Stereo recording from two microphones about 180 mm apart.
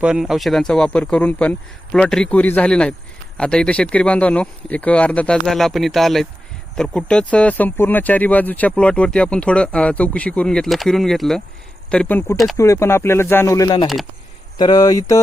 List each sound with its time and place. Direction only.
0.0 s speech: 5° right (ahead or behind); by 15.2 s 20° left (ahead or behind)